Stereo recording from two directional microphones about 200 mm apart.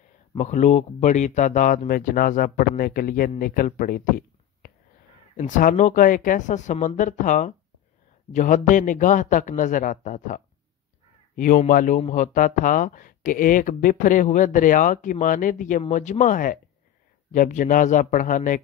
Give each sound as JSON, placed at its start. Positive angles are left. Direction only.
{"t": 0.3, "sound": "speech", "side_deg": 35}
{"t": 5.4, "sound": "speech", "side_deg": 40}